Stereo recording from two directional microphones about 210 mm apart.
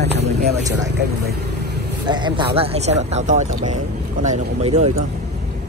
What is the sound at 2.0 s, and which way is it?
Speech, 20° right (ahead or behind).